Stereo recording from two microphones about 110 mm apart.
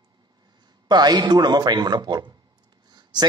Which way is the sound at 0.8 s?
40° right (ahead or behind).